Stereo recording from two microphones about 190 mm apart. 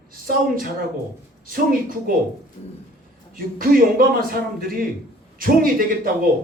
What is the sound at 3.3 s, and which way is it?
Speech, 50° right (ahead or behind).